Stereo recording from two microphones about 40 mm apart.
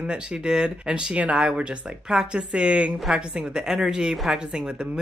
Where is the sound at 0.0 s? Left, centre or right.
Right.